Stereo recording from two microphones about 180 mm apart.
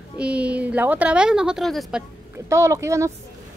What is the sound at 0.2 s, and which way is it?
Speech, 5° right (ahead or behind).